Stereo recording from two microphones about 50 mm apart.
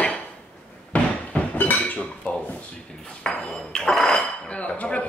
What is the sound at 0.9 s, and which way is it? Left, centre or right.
Slam, left.